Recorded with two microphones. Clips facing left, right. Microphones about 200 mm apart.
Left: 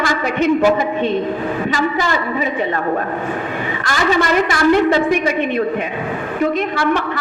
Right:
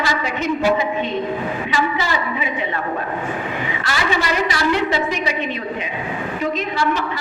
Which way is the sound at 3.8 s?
45° left (ahead or behind).